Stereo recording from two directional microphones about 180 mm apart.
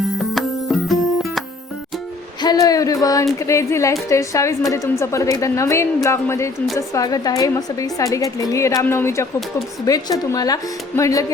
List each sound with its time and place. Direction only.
0.3 s music: centre (ahead or behind)
2.4 s a sound: 20° left (ahead or behind)
3.3 s a woman's voice: 15° left (ahead or behind)